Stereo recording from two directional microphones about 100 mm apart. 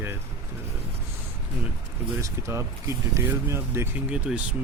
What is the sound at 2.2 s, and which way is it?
Speech, 25° right (ahead or behind).